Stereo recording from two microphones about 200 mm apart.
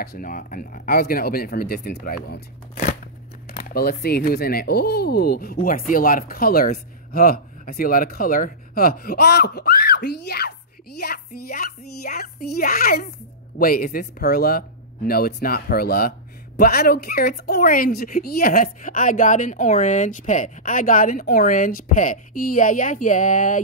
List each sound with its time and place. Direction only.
0.0 s speech: 45° left (ahead or behind)